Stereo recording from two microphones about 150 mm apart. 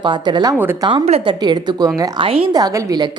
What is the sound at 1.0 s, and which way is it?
Speech, 45° right (ahead or behind).